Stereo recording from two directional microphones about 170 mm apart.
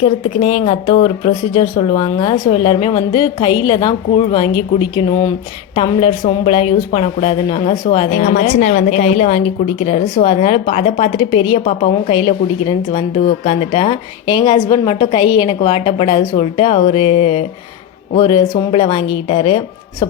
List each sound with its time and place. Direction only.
0.0 s a woman's voice: 40° left (ahead or behind); by 2.5 s 20° left (ahead or behind)
2.5 s a woman's voice: 35° left (ahead or behind)
8.3 s a woman's voice: 50° left (ahead or behind); by 20.1 s 30° left (ahead or behind)